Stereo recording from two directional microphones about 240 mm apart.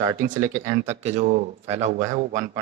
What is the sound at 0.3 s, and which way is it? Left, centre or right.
A man's voice, right.